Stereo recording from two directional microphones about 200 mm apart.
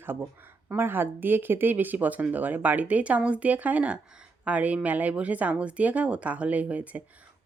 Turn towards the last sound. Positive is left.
turn(degrees=-5)  # may be behind; listen again after turning